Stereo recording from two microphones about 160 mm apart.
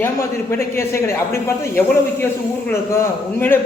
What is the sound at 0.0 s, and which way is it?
A man's voice, 15° left (ahead or behind).